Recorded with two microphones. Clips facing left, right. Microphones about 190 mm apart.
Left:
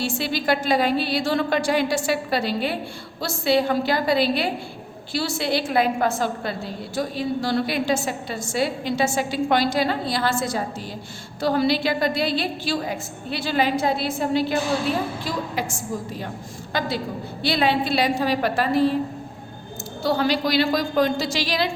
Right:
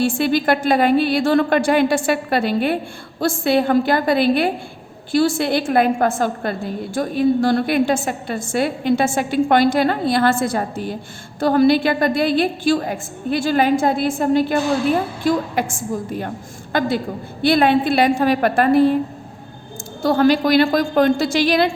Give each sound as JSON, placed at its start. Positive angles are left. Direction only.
{"t": 0.0, "sound": "a woman's voice", "side_deg": -55}
{"t": 20.0, "sound": "a woman's voice", "side_deg": -50}